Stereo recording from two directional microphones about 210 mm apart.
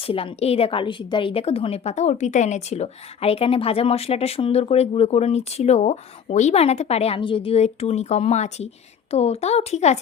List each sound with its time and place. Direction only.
0.1 s a woman's voice: 30° left (ahead or behind)